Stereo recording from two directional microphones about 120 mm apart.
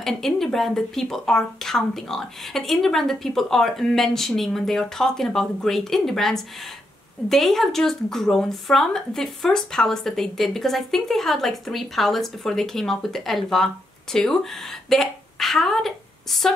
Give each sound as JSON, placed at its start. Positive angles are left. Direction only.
{"t": 0.0, "sound": "a woman's voice", "side_deg": 5}